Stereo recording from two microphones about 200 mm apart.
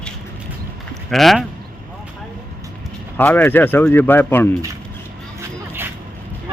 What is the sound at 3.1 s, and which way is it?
Speech, 10° left (ahead or behind).